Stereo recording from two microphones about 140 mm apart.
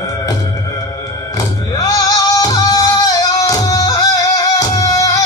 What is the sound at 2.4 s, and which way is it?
Music, 25° left (ahead or behind).